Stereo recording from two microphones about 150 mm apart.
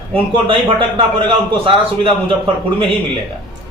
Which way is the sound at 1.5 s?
35° right (ahead or behind).